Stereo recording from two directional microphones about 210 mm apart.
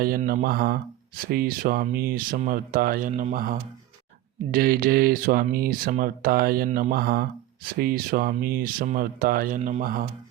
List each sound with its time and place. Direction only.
0.0 s speech: 45° right (ahead or behind)